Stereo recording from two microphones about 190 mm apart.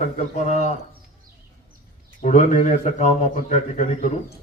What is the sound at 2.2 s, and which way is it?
A man's voice, 40° left (ahead or behind).